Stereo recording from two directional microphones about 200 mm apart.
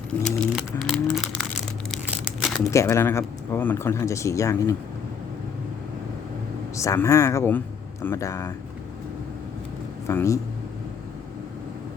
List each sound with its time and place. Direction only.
0.2 s a sound: centre (ahead or behind)
1.9 s crumpling: centre (ahead or behind)
2.6 s speech: 15° left (ahead or behind)
6.7 s speech: 15° left (ahead or behind)
10.1 s speech: 15° left (ahead or behind)